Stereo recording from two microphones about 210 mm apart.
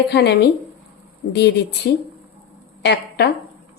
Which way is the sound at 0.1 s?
55° left (ahead or behind).